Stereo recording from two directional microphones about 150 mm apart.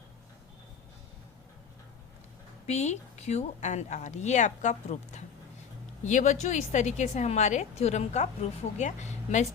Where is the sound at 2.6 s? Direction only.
45° left (ahead or behind).